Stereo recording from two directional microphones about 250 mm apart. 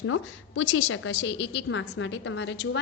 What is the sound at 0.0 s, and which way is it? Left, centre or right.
A woman's voice, left.